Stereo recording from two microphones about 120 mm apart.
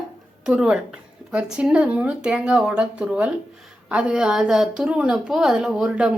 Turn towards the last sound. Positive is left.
turn(degrees=-5)  # may be behind; listen again after turning